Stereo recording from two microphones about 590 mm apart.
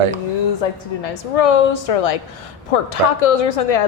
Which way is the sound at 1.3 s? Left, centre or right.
Left.